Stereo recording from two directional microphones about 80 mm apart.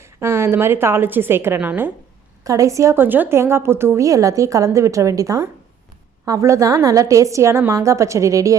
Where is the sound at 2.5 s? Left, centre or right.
Right.